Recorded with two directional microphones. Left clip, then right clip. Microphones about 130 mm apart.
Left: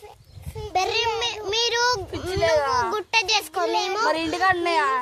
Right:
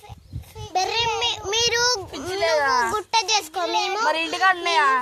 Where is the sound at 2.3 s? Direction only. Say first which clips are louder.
Right 1 dB; 15° left (ahead or behind).